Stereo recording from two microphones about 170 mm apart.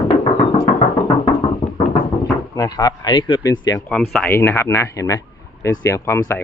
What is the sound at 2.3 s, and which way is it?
Speech, 20° left (ahead or behind).